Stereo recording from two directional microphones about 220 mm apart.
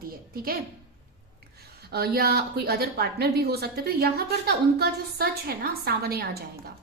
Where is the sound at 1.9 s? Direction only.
45° right (ahead or behind).